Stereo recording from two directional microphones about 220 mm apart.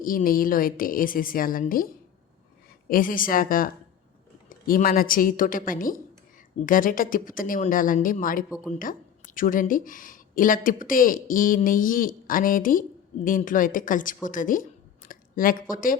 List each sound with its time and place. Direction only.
0.0 s speech: 40° left (ahead or behind)
2.9 s speech: 40° left (ahead or behind)